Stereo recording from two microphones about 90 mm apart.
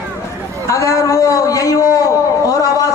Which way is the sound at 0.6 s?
35° left (ahead or behind).